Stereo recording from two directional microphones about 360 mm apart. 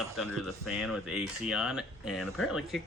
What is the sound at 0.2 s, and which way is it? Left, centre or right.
Speech, centre.